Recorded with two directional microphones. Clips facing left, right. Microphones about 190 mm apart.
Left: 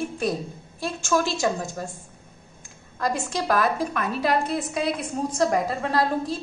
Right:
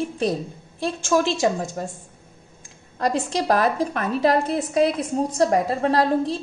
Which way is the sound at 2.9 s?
35° right (ahead or behind).